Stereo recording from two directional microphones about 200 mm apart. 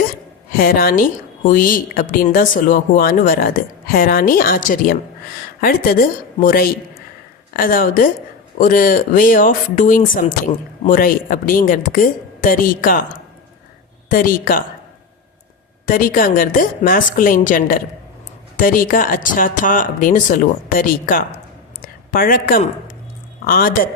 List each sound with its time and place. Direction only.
0.5 s speech: 45° left (ahead or behind)
14.1 s speech: 45° left (ahead or behind)
15.9 s speech: 45° left (ahead or behind)